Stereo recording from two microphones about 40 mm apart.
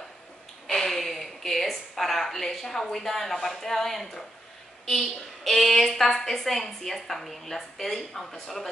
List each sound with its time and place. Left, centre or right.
0.7 s a woman's voice: centre